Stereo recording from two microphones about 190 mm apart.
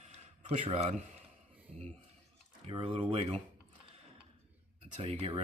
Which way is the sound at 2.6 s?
30° right (ahead or behind).